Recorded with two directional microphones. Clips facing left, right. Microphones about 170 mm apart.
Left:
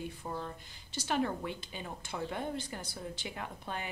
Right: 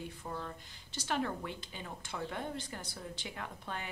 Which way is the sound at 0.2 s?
15° left (ahead or behind).